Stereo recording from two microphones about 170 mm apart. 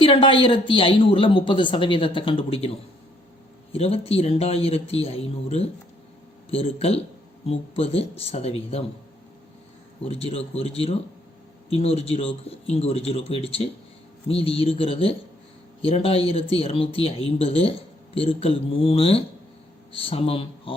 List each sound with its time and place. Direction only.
0.0 s speech: 30° left (ahead or behind)
10.0 s speech: 35° left (ahead or behind)